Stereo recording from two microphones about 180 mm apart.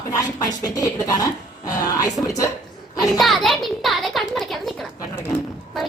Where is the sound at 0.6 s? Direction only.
20° left (ahead or behind).